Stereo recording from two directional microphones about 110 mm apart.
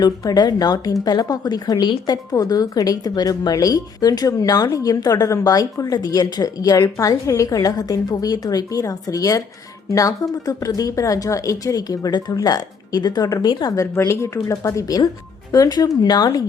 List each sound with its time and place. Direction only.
0.0 s speech: 35° left (ahead or behind)
13.9 s speech: 25° left (ahead or behind)